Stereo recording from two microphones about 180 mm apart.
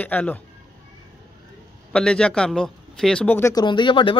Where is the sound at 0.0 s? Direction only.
10° left (ahead or behind).